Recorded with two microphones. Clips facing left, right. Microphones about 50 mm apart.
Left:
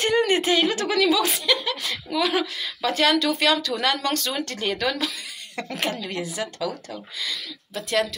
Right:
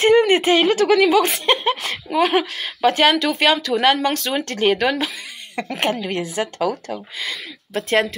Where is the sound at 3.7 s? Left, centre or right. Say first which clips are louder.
Right 6 dB; centre.